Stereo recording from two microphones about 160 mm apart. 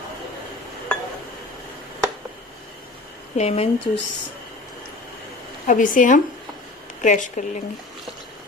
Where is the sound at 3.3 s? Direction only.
40° left (ahead or behind).